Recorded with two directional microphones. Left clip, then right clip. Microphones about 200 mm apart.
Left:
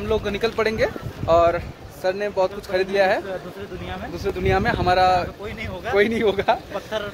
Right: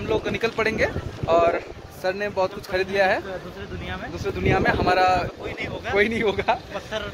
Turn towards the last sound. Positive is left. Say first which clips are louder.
# left 3 dB
turn(degrees=5)  # may be behind; listen again after turning